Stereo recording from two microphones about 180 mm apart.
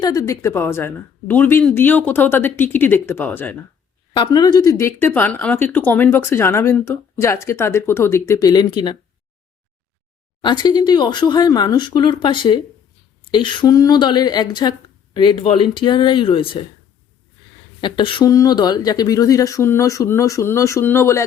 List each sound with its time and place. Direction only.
0.0 s speech: 20° left (ahead or behind)
4.1 s speech: 25° left (ahead or behind)
10.4 s speech: 25° left (ahead or behind)
17.7 s speech: 25° left (ahead or behind)